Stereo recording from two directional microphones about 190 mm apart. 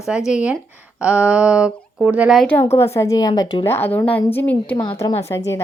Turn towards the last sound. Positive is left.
turn(degrees=15)  # may be behind; listen again after turning